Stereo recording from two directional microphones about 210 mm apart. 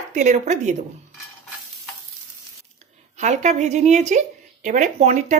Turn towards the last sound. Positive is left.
turn(degrees=-35)  # may be behind; listen again after turning